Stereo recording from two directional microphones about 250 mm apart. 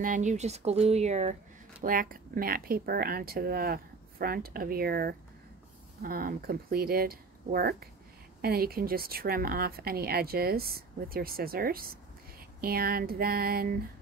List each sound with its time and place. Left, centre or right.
0.0 s speech: right